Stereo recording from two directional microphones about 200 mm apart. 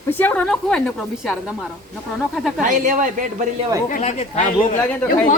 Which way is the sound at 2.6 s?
40° right (ahead or behind).